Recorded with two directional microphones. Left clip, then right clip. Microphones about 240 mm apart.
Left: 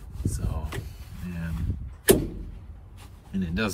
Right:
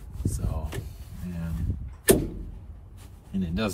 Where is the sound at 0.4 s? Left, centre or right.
Centre.